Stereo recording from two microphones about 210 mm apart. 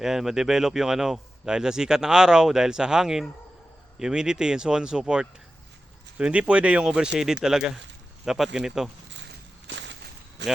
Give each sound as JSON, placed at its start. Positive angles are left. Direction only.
{"t": 0.0, "sound": "speech", "side_deg": 0}
{"t": 9.6, "sound": "a sound", "side_deg": -60}
{"t": 10.4, "sound": "speech", "side_deg": -55}